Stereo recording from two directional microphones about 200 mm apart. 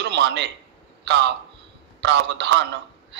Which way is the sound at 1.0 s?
60° right (ahead or behind).